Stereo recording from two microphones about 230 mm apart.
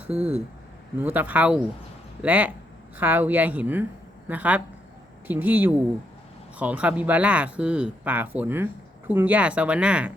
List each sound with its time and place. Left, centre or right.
0.9 s speech: centre